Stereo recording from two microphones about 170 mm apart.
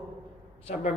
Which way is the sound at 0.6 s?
40° left (ahead or behind).